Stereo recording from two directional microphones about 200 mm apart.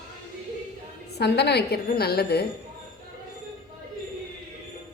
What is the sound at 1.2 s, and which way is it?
A woman's voice, 55° left (ahead or behind).